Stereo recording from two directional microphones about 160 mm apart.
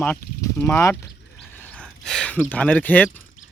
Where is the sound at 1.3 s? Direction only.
5° left (ahead or behind).